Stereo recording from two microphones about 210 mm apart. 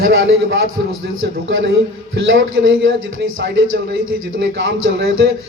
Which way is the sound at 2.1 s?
60° right (ahead or behind).